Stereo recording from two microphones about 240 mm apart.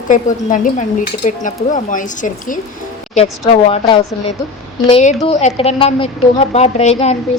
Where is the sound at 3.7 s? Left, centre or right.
Left.